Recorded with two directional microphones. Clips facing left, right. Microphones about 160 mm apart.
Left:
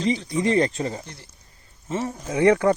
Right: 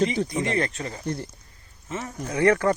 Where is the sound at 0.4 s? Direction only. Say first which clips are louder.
Left 5 dB; 30° left (ahead or behind).